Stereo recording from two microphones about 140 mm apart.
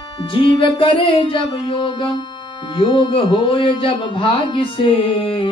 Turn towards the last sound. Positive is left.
turn(degrees=40)  # may be behind; listen again after turning